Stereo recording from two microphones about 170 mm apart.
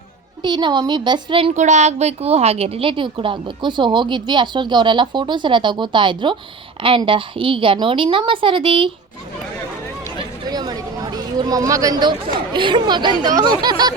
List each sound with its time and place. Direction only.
0.4 s a woman's voice: 25° right (ahead or behind)
10.5 s a sound: 25° right (ahead or behind)
12.5 s a woman's voice: 30° right (ahead or behind)